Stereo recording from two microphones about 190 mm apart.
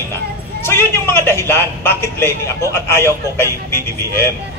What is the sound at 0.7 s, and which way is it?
A woman's voice, 10° left (ahead or behind).